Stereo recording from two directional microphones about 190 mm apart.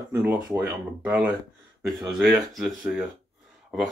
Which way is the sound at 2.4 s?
Centre (ahead or behind).